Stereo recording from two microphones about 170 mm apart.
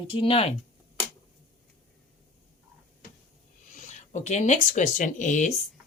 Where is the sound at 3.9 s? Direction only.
45° left (ahead or behind).